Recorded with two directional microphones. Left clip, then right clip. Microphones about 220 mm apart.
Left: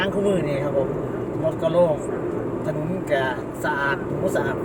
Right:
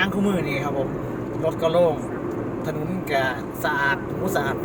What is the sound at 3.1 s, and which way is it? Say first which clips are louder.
Vehicle: even; 25° right (ahead or behind).